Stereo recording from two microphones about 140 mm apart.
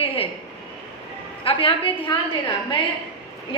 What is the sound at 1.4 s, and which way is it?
Speech, 40° left (ahead or behind).